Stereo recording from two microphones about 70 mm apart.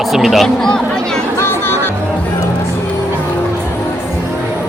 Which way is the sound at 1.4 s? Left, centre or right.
Left.